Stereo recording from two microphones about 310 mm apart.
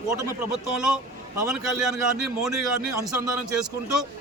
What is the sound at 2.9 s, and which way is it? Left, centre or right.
Speech, centre.